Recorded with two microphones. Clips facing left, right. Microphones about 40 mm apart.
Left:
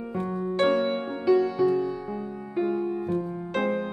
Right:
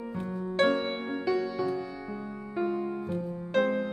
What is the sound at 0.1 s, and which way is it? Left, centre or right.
Music, centre.